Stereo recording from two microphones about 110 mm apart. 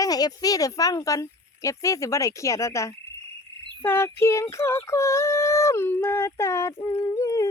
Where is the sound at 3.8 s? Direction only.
20° left (ahead or behind).